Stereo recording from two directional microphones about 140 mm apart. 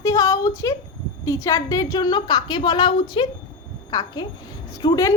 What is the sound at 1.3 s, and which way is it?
A woman's voice, 20° left (ahead or behind).